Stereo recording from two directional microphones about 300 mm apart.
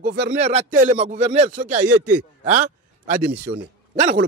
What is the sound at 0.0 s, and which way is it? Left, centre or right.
Speech, right.